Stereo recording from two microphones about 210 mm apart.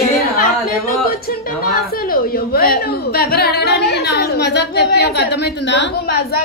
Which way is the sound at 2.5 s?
45° left (ahead or behind).